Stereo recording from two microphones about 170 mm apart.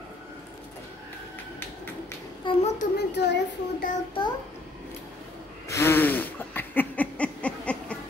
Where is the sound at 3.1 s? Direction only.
90° left.